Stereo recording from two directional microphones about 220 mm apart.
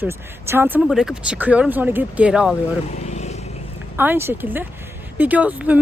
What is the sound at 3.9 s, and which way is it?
A woman's voice, 10° right (ahead or behind).